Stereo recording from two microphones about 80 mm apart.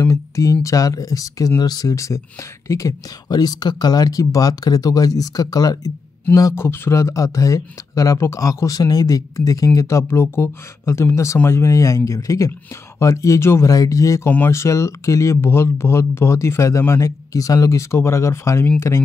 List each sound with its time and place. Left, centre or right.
0.1 s speech: left
3.3 s speech: left
6.5 s speech: left